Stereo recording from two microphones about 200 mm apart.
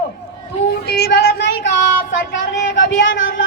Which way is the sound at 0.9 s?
55° left (ahead or behind).